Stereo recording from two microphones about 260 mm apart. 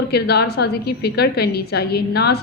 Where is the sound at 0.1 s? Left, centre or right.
Left.